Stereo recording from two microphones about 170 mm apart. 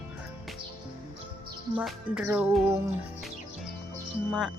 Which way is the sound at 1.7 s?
Centre (ahead or behind).